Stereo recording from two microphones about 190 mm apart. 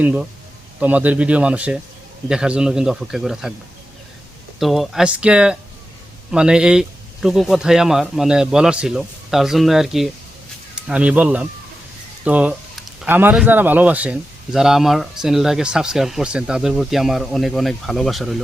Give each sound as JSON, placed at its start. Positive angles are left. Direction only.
{"t": 0.0, "sound": "a man's voice", "side_deg": -10}
{"t": 4.6, "sound": "speech", "side_deg": 0}